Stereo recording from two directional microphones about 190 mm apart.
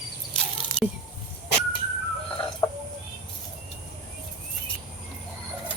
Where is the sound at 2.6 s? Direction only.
20° left (ahead or behind).